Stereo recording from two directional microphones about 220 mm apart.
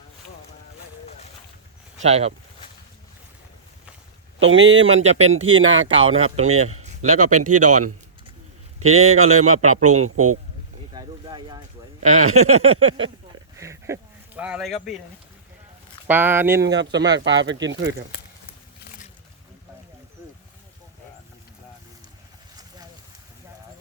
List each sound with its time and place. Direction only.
1.0 s a sound: 30° left (ahead or behind)
2.0 s speech: 30° right (ahead or behind)
4.4 s speech: 60° right (ahead or behind)
4.9 s speech: 30° right (ahead or behind)
5.5 s a man's voice: 60° right (ahead or behind); by 7.9 s 90° right
8.8 s a man's voice: 75° right (ahead or behind)
10.9 s speech: 20° right (ahead or behind)
12.0 s a man's voice: 75° right (ahead or behind)
13.6 s speech: 15° right (ahead or behind)
16.0 s speech: 10° right (ahead or behind)
16.6 s speech: 55° right (ahead or behind)
18.8 s a sound: 35° left (ahead or behind)